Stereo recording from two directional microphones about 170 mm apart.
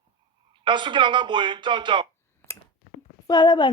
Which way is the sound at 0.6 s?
25° right (ahead or behind).